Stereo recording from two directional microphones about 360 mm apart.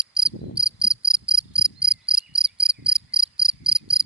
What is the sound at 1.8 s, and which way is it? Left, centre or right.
Cricket, centre.